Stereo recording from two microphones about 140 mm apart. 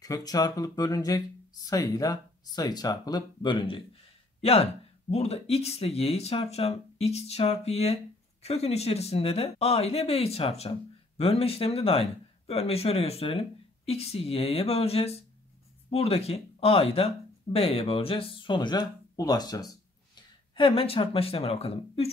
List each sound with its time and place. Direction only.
0.0 s speech: 25° left (ahead or behind); by 22.1 s 45° left (ahead or behind)